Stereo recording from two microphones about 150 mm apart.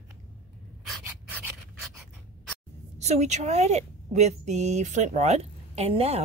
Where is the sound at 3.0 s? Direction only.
50° right (ahead or behind).